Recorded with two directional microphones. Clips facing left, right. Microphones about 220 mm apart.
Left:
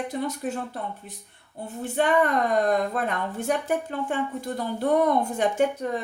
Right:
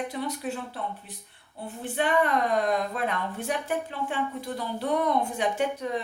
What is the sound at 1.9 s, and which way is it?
A woman's voice, 45° left (ahead or behind).